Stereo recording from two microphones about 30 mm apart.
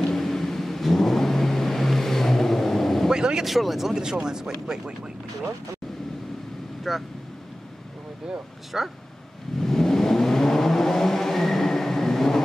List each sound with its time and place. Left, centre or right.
0.1 s vehicle: centre
3.1 s vehicle: right
3.4 s speech: centre
3.9 s speech: right
6.9 s speech: centre
8.7 s speech: centre
9.6 s vehicle: centre